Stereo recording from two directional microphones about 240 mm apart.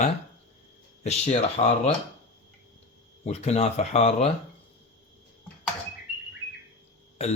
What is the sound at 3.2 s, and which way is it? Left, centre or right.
Speech, left.